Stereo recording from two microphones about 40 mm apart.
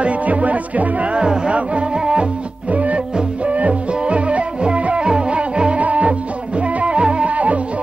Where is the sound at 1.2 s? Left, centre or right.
Right.